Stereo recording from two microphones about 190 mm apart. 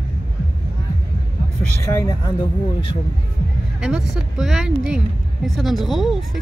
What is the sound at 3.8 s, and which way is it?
Speech, 5° right (ahead or behind).